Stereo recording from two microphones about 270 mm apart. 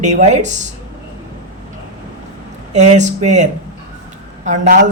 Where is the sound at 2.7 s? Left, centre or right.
Right.